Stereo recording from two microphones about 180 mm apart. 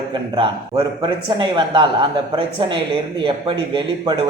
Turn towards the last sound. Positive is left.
turn(degrees=-25)  # may be behind; listen again after turning